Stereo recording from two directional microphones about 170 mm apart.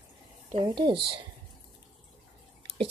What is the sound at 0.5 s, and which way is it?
Speech, 30° right (ahead or behind).